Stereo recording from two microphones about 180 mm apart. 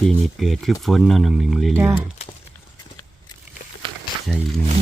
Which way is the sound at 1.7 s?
15° right (ahead or behind).